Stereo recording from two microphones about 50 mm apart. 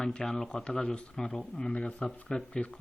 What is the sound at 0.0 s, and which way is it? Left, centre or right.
Speech, centre.